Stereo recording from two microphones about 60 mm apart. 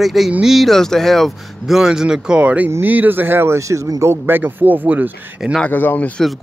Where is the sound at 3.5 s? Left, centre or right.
Right.